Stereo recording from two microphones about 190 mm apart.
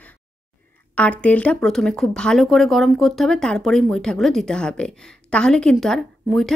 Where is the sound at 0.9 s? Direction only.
5° left (ahead or behind).